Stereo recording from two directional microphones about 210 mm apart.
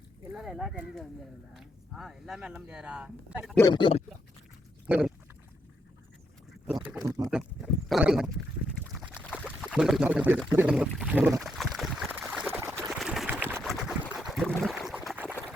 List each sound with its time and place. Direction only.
0.3 s speech: centre (ahead or behind)
3.7 s speech: 25° left (ahead or behind)
4.9 s a sound: 5° right (ahead or behind)
6.8 s speech: 5° right (ahead or behind)
9.0 s boat: 5° right (ahead or behind)
9.7 s speech: centre (ahead or behind)
11.4 s a sound: centre (ahead or behind)